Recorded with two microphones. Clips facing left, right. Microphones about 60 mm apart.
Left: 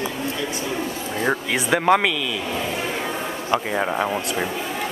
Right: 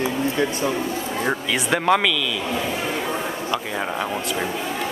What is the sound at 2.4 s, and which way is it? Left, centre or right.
Speech, centre.